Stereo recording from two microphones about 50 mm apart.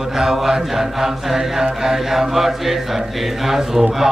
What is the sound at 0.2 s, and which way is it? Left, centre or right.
Mantra, centre.